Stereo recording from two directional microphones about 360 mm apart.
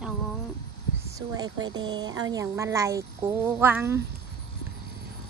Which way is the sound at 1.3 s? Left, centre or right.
Centre.